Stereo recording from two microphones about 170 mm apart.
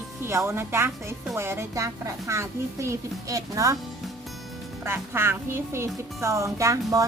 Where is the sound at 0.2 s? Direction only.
15° right (ahead or behind).